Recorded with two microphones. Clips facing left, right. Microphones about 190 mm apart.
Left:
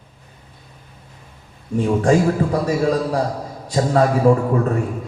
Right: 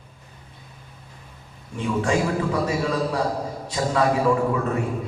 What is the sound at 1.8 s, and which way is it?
A man's voice, 40° left (ahead or behind).